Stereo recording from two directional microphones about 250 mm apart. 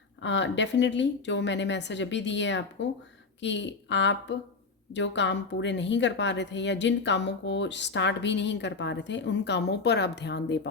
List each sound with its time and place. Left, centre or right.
0.2 s a woman's voice: left